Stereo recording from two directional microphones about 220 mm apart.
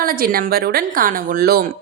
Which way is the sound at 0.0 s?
40° right (ahead or behind).